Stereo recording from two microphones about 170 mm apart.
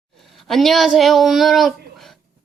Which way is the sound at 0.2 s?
Centre (ahead or behind).